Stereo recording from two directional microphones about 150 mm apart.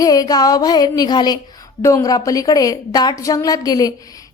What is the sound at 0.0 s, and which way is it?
A woman's voice, 25° left (ahead or behind).